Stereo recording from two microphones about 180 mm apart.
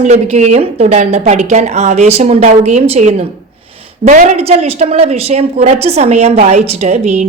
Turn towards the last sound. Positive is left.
turn(degrees=-40)  # may be behind; listen again after turning